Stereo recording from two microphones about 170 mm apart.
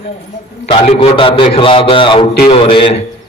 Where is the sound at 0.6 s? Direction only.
35° left (ahead or behind).